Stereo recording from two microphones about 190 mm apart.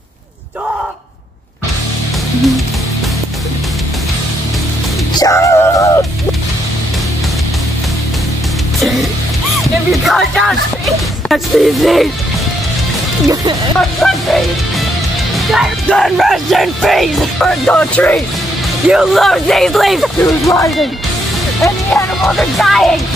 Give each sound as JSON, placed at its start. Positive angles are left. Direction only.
{"t": 5.1, "sound": "music", "side_deg": 15}
{"t": 10.0, "sound": "speech", "side_deg": 0}
{"t": 13.7, "sound": "speech", "side_deg": 0}
{"t": 20.4, "sound": "speech", "side_deg": 15}
{"t": 22.2, "sound": "speech", "side_deg": 0}